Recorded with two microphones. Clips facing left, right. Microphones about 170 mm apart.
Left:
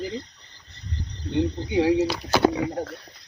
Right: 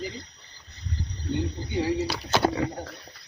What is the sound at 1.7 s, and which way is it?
Speech, 60° left (ahead or behind).